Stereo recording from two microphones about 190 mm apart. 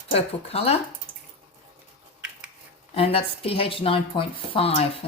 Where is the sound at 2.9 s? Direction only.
30° left (ahead or behind).